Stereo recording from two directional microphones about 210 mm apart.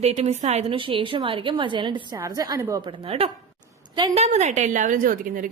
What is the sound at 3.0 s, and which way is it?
A woman's voice, 25° right (ahead or behind).